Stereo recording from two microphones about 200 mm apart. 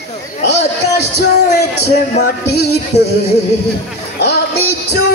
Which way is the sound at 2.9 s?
35° left (ahead or behind).